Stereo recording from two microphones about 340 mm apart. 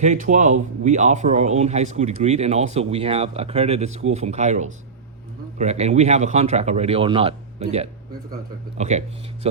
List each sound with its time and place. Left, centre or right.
0.0 s speech: right